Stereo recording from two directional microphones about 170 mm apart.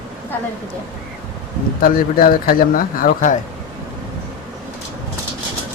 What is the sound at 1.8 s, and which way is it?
Speech, 60° left (ahead or behind).